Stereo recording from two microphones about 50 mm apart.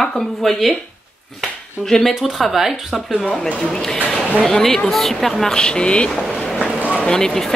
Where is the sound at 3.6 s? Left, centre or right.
Centre.